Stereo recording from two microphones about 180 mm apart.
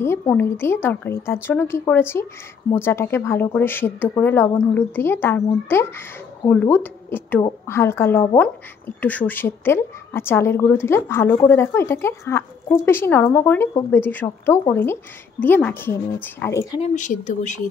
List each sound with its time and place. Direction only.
0.0 s a woman's voice: 15° left (ahead or behind)
16.8 s speech: 45° left (ahead or behind)